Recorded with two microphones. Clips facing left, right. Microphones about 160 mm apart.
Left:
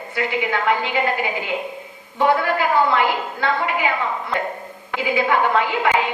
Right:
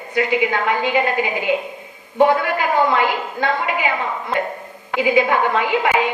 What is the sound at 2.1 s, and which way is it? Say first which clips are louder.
Speech: right 3 dB; 20° right (ahead or behind).